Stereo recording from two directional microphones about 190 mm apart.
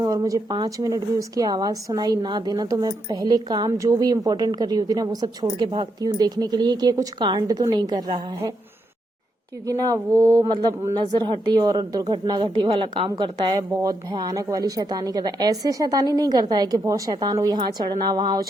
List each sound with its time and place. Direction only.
0.0 s a woman's voice: 20° right (ahead or behind)
9.6 s a woman's voice: 20° right (ahead or behind)